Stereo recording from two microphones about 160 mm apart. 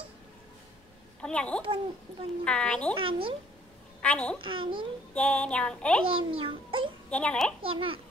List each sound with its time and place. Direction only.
1.2 s a woman's voice: 5° left (ahead or behind)
2.4 s a sound: 5° left (ahead or behind)
2.9 s a child's voice: 35° right (ahead or behind)
4.0 s a child's voice: 10° left (ahead or behind)
4.4 s a child's voice: 30° right (ahead or behind)
5.1 s a sound: 10° left (ahead or behind)
6.0 s a child's voice: 35° right (ahead or behind)
7.1 s a sound: 5° left (ahead or behind)
7.6 s a child's voice: 35° right (ahead or behind)